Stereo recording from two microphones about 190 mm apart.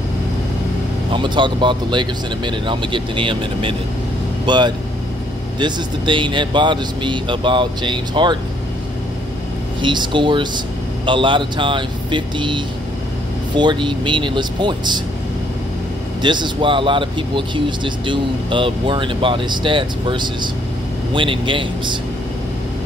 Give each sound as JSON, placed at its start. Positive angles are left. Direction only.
{"t": 1.1, "sound": "speech", "side_deg": -25}
{"t": 9.8, "sound": "speech", "side_deg": -25}
{"t": 16.2, "sound": "speech", "side_deg": -25}